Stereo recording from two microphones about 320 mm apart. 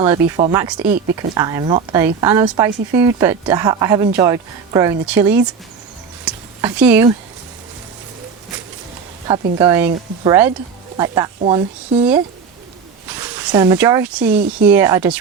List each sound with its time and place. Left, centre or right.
0.3 s speech: centre
0.8 s speech: right
1.3 s speech: centre
6.2 s a sound: centre
9.2 s speech: centre
13.1 s speech: centre